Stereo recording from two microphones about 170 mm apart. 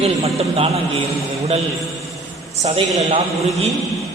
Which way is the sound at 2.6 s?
40° right (ahead or behind).